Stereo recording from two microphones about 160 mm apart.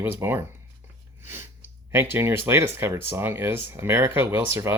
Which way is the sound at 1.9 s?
15° right (ahead or behind).